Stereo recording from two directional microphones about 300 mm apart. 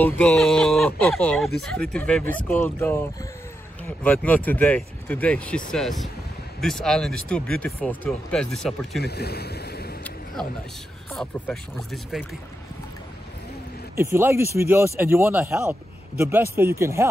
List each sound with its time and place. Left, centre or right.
0.0 s speech: centre
9.0 s speech: left
11.1 s speech: centre
13.9 s speech: centre